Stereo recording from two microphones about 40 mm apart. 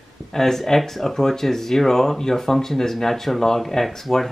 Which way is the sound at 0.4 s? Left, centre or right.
Centre.